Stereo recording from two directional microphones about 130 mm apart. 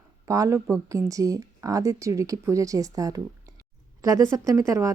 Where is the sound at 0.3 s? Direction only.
25° right (ahead or behind).